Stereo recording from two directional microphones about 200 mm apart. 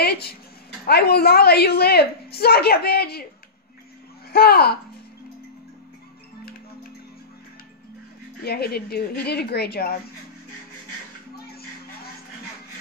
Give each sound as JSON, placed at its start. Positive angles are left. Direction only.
{"t": 0.0, "sound": "a woman's voice", "side_deg": 55}
{"t": 4.3, "sound": "a woman's voice", "side_deg": 50}
{"t": 8.4, "sound": "a woman's voice", "side_deg": 50}